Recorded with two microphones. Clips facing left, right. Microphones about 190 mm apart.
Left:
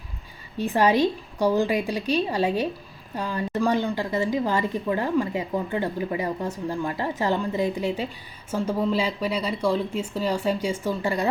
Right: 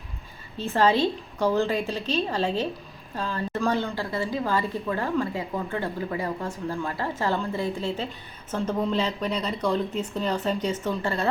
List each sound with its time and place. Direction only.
0.5 s a woman's voice: 15° left (ahead or behind)